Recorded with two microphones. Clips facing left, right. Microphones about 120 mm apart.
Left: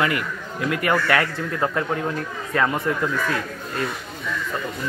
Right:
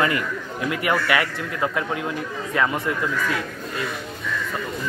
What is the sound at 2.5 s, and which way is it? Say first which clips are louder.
Speech: left 1 dB; 5° left (ahead or behind).